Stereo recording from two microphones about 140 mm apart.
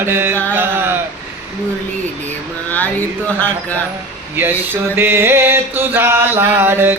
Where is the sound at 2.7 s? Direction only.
10° left (ahead or behind).